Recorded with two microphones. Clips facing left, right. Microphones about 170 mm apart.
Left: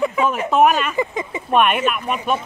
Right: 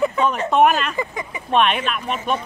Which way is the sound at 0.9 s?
20° left (ahead or behind).